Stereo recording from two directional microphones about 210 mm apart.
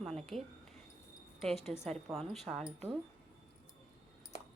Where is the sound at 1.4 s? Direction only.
Centre (ahead or behind).